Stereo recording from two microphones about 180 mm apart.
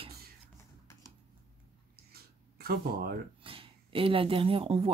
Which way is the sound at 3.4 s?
30° right (ahead or behind).